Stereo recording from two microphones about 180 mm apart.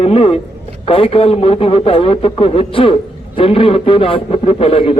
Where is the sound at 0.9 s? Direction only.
30° left (ahead or behind).